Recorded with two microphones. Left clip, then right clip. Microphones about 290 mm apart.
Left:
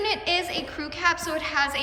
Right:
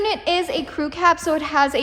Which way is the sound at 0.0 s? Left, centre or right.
Centre.